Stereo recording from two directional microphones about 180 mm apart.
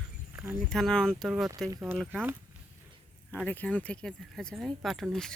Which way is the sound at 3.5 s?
10° left (ahead or behind).